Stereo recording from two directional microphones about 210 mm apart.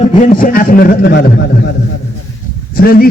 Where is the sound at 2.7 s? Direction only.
45° left (ahead or behind).